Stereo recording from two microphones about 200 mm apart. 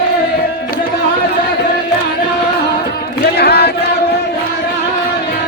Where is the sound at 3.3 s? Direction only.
55° left (ahead or behind).